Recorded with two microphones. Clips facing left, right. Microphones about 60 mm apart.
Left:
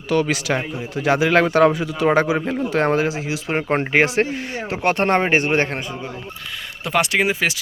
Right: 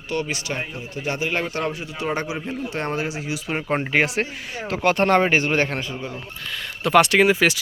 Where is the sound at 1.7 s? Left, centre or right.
Left.